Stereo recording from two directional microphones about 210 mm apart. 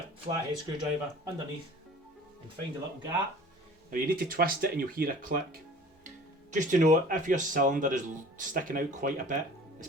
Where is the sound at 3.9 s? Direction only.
45° right (ahead or behind).